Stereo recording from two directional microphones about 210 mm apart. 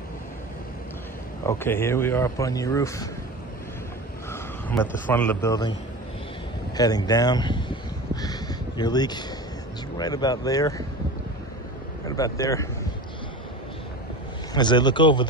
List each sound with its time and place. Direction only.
1.4 s speech: 10° left (ahead or behind)
4.3 s a man's voice: 10° left (ahead or behind)
6.8 s a sound: 20° left (ahead or behind)
9.9 s speech: 20° left (ahead or behind)
12.2 s speech: 15° left (ahead or behind)
14.5 s a man's voice: 20° left (ahead or behind)